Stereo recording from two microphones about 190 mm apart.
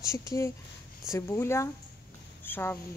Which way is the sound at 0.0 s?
15° left (ahead or behind).